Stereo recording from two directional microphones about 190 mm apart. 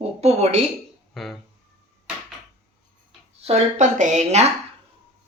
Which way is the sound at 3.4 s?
35° right (ahead or behind).